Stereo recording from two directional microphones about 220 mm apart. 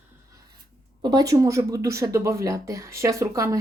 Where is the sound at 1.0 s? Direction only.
20° right (ahead or behind).